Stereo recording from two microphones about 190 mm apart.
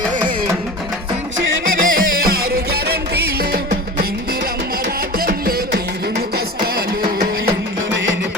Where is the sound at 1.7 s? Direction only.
50° right (ahead or behind).